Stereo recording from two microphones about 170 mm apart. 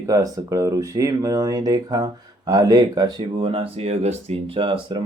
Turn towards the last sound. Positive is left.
turn(degrees=-30)  # may be behind; listen again after turning